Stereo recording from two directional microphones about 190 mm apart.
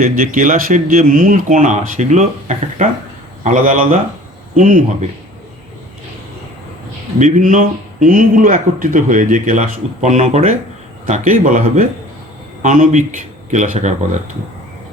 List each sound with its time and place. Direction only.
0.0 s a man's voice: 45° right (ahead or behind)
7.2 s a man's voice: 40° right (ahead or behind)